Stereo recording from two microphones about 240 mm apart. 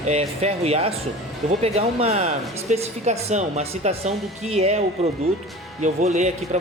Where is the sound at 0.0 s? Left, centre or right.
Right.